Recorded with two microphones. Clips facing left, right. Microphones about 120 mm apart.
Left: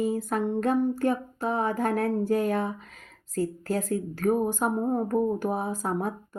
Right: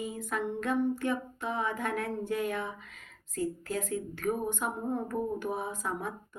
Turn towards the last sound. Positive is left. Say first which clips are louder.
# left 6 dB
turn(degrees=35)  # may be behind; listen again after turning